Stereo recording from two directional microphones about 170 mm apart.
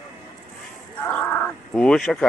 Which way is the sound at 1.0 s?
5° left (ahead or behind).